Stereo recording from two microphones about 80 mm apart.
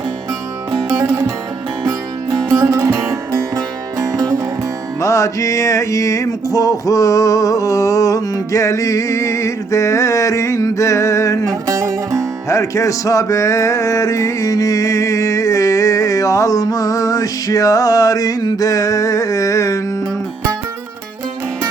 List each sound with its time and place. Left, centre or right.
0.9 s music: right
2.5 s music: right
4.9 s music: left
11.7 s music: right
12.5 s music: left